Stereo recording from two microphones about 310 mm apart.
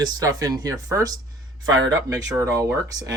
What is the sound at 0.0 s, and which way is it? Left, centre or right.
Speech, centre.